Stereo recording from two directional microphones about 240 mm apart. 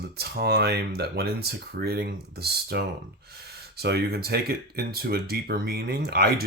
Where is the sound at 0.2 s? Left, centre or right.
Right.